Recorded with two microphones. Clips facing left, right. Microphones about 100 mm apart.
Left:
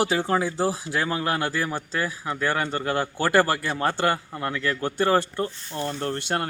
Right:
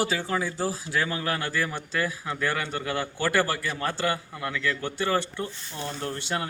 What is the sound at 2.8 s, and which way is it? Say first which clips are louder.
A man's voice: left 4 dB; 45° left (ahead or behind).